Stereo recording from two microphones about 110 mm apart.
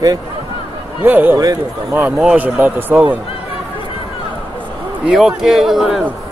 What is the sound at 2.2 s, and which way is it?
Speech, 15° right (ahead or behind).